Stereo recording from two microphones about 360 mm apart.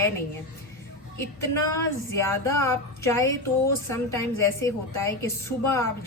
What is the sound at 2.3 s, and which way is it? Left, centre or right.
A woman's voice, centre.